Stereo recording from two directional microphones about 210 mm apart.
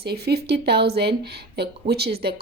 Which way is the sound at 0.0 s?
50° right (ahead or behind).